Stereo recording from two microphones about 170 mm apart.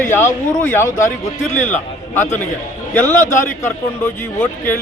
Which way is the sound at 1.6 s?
45° left (ahead or behind).